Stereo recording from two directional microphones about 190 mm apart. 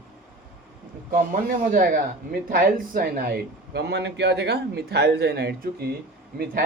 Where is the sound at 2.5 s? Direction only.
50° right (ahead or behind).